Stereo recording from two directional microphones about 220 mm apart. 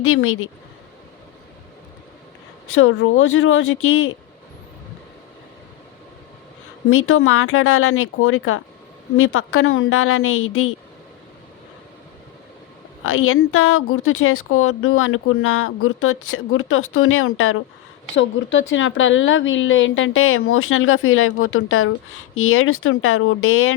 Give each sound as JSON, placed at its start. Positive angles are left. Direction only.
{"t": 0.0, "sound": "a woman's voice", "side_deg": 70}
{"t": 2.7, "sound": "speech", "side_deg": 65}
{"t": 6.9, "sound": "a woman's voice", "side_deg": 70}
{"t": 13.1, "sound": "a woman's voice", "side_deg": 70}
{"t": 18.2, "sound": "a woman's voice", "side_deg": 60}